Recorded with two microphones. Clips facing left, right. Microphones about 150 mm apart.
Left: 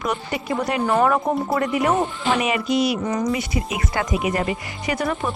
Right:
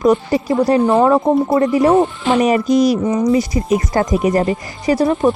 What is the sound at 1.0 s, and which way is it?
Speech, 25° right (ahead or behind).